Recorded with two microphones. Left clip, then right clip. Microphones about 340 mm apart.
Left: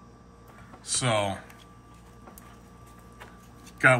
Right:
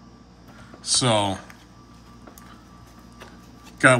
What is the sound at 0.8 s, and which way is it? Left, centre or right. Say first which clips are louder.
Speech: right 6 dB; centre.